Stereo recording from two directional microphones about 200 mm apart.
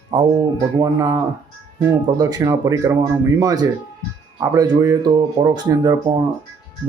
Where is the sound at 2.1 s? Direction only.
20° right (ahead or behind).